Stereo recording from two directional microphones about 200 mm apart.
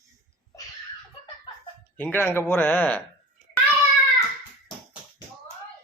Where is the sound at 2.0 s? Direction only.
10° left (ahead or behind).